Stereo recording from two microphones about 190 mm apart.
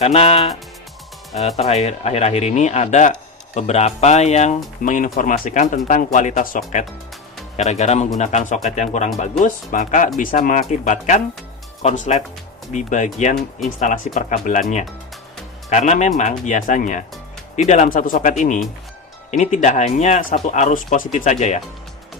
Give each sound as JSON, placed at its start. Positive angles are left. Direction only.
{"t": 0.0, "sound": "speech", "side_deg": 35}
{"t": 15.9, "sound": "speech", "side_deg": 40}